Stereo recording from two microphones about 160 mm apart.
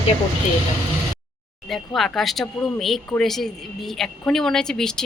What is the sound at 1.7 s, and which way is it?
Speech, centre (ahead or behind).